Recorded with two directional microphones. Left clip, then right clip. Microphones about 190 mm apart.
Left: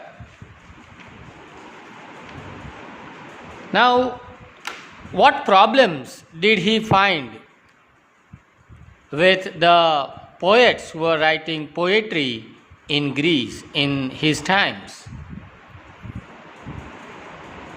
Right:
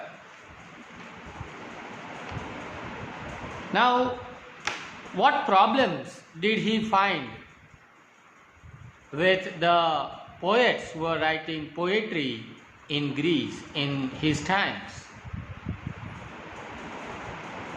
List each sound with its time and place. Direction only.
3.7 s a man's voice: 65° left (ahead or behind)
5.1 s a man's voice: 65° left (ahead or behind)
9.1 s a man's voice: 60° left (ahead or behind)